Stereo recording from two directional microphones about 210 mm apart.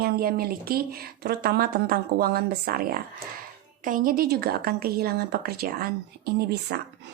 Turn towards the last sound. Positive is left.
turn(degrees=-50)  # may be behind; listen again after turning